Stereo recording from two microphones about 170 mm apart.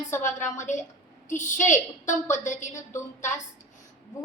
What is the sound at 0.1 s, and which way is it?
Speech, 15° left (ahead or behind).